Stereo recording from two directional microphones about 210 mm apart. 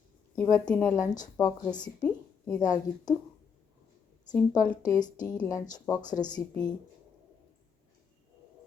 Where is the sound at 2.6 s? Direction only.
20° left (ahead or behind).